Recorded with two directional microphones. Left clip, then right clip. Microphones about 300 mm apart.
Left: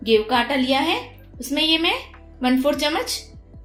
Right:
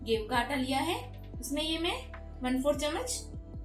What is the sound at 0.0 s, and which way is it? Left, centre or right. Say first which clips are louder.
A woman's voice: left 12 dB; left.